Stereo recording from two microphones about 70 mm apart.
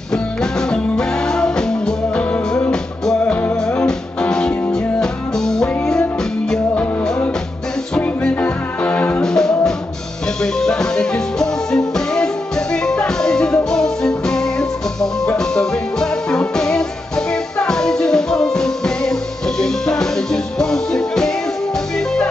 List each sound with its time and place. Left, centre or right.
0.1 s music: centre
6.7 s music: left
9.2 s music: centre